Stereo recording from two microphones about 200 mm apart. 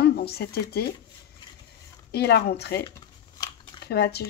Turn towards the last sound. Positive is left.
turn(degrees=55)  # may be behind; listen again after turning